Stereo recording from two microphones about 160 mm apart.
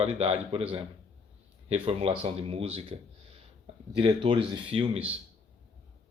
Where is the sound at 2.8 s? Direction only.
35° right (ahead or behind).